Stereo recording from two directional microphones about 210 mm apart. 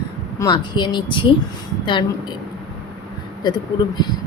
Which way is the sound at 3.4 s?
20° left (ahead or behind).